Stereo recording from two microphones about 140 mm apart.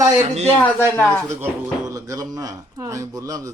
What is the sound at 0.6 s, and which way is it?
Speech, 10° left (ahead or behind).